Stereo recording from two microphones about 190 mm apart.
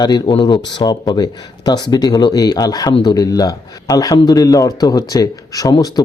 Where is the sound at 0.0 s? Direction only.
20° left (ahead or behind).